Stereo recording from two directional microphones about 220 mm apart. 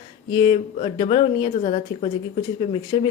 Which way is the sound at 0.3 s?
25° left (ahead or behind).